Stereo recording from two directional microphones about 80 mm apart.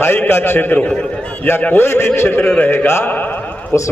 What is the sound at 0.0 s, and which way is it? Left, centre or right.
A man's voice, left.